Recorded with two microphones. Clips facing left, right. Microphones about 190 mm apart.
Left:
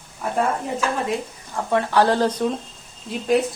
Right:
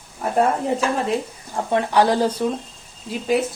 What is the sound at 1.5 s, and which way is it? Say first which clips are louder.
Speech: right 1 dB; 20° right (ahead or behind).